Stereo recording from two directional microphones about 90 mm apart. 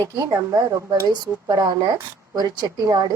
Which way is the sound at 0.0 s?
35° right (ahead or behind).